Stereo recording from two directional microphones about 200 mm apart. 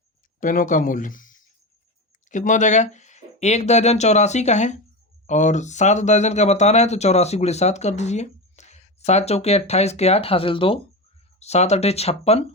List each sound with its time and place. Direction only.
0.3 s speech: 40° left (ahead or behind)